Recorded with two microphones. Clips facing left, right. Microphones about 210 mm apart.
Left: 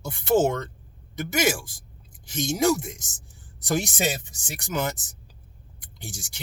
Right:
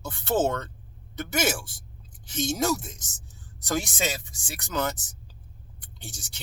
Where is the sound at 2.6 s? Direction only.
15° left (ahead or behind).